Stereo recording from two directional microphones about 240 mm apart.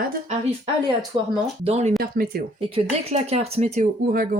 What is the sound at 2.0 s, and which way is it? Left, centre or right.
Speech, right.